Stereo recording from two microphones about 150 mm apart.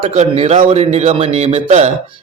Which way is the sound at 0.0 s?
50° right (ahead or behind).